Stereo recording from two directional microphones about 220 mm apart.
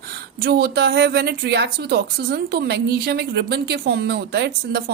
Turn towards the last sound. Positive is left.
turn(degrees=-50)  # may be behind; listen again after turning